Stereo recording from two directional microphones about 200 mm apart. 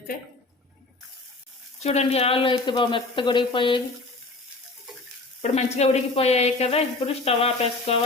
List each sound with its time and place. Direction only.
1.8 s speech: 30° left (ahead or behind)
5.4 s speech: 35° left (ahead or behind)